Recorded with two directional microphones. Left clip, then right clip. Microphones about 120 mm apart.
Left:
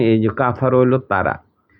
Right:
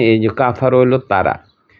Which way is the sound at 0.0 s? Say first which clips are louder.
Right 3 dB; 15° right (ahead or behind).